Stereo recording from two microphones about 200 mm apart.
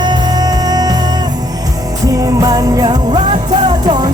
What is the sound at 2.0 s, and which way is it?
Music, 15° right (ahead or behind).